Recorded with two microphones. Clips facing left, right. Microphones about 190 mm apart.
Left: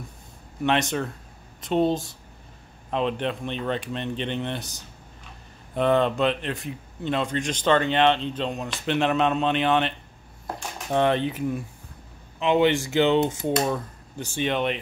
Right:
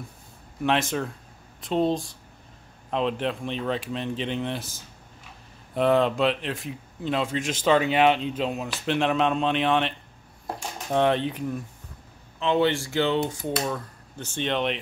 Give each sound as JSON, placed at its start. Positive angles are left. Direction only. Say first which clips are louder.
{"t": 0.7, "sound": "speech", "louder": "left 1 dB", "side_deg": 0}
{"t": 12.4, "sound": "speech", "louder": "left 2 dB", "side_deg": 15}